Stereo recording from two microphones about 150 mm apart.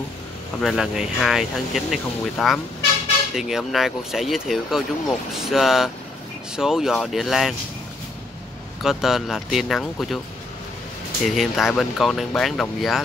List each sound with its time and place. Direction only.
0.6 s speech: centre (ahead or behind)
8.8 s speech: centre (ahead or behind)
11.2 s speech: centre (ahead or behind)